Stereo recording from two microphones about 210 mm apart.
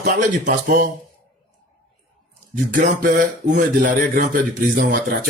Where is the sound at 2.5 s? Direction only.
40° right (ahead or behind).